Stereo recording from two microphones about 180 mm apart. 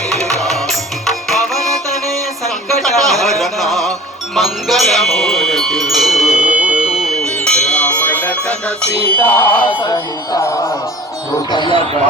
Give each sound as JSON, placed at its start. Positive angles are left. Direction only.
{"t": 0.1, "sound": "music", "side_deg": 0}
{"t": 4.4, "sound": "wind chime", "side_deg": 0}
{"t": 9.0, "sound": "speech", "side_deg": 10}
{"t": 9.8, "sound": "speech", "side_deg": 20}